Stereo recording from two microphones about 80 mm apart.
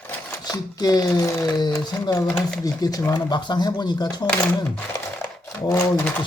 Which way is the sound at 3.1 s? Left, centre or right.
Left.